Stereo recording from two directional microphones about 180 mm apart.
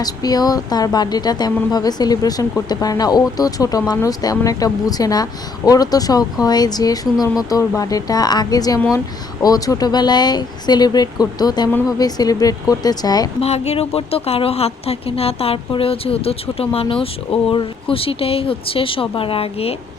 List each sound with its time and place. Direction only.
0.0 s speech: 20° left (ahead or behind)
13.4 s speech: 35° left (ahead or behind)